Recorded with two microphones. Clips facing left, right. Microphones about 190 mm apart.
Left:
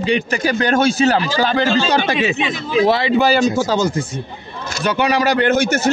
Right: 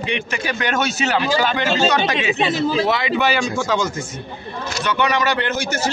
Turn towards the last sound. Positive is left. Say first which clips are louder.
# left 8 dB
turn(degrees=55)  # may be behind; listen again after turning